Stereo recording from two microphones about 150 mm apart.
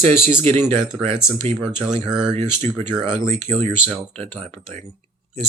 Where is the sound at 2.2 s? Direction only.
40° right (ahead or behind).